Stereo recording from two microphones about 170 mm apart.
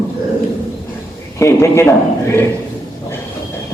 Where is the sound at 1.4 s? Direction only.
15° left (ahead or behind).